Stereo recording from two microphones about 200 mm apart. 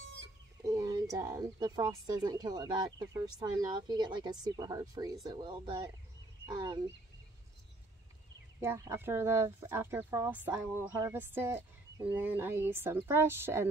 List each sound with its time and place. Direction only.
0.7 s a sound: 20° right (ahead or behind)
1.1 s speech: 15° right (ahead or behind)
8.5 s speech: 15° right (ahead or behind)